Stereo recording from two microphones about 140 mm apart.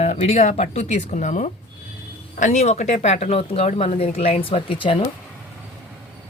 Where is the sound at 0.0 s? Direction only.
50° left (ahead or behind).